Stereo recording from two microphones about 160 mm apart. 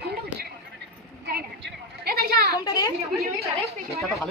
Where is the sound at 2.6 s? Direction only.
25° left (ahead or behind).